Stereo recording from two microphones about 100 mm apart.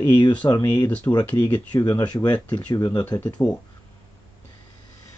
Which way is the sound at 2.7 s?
35° left (ahead or behind).